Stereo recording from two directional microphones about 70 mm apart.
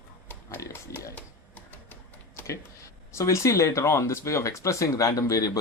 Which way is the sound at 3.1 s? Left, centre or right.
Left.